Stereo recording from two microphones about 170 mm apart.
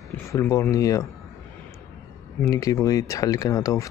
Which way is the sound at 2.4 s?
20° left (ahead or behind).